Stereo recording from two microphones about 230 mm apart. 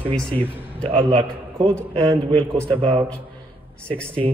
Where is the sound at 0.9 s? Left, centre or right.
Right.